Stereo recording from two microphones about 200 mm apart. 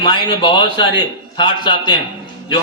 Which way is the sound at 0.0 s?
25° left (ahead or behind).